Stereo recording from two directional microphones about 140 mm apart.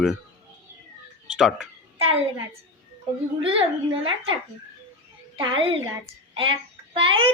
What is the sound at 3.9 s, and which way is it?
Speech, 40° right (ahead or behind).